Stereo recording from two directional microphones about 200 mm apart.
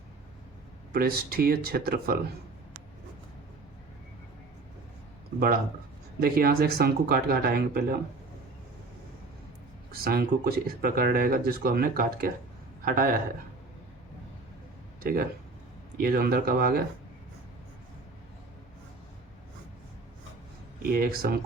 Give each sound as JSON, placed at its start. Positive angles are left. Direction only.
{"t": 0.9, "sound": "speech", "side_deg": -50}
{"t": 6.1, "sound": "speech", "side_deg": -50}
{"t": 9.9, "sound": "a man's voice", "side_deg": -50}
{"t": 15.0, "sound": "speech", "side_deg": -45}
{"t": 20.8, "sound": "speech", "side_deg": -50}